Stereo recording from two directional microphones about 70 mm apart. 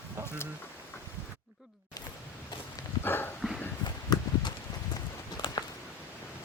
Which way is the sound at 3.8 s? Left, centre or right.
Left.